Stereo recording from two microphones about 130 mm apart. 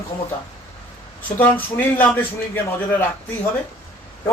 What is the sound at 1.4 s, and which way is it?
Speech, 15° left (ahead or behind).